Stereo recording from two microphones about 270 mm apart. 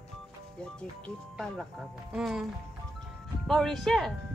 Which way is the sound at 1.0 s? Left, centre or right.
Centre.